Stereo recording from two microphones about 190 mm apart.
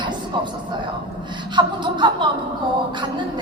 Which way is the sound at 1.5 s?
25° right (ahead or behind).